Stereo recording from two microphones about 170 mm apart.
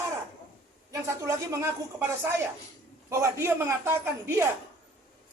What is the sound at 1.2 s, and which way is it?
Speech, 15° right (ahead or behind).